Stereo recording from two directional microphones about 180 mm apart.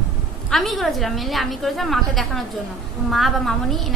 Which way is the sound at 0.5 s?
Centre (ahead or behind).